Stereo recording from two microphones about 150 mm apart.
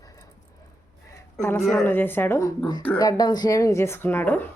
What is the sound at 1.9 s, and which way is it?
A woman's voice, 15° left (ahead or behind).